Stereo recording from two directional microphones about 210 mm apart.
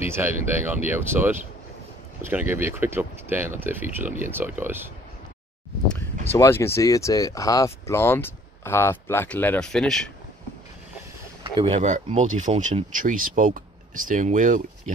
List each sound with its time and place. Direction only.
0.1 s speech: 10° right (ahead or behind)
6.3 s speech: 10° left (ahead or behind)
11.4 s speech: 25° right (ahead or behind)